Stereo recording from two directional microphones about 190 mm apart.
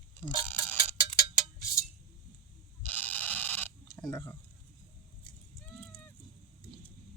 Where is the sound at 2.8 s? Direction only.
10° left (ahead or behind).